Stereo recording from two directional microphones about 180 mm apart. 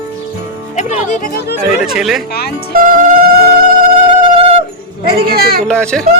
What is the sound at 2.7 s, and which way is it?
Speech, 50° right (ahead or behind).